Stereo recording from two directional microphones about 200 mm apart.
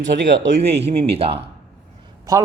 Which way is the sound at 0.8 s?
30° right (ahead or behind).